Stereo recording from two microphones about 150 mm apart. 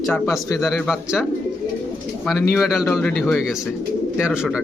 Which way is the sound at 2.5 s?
Centre (ahead or behind).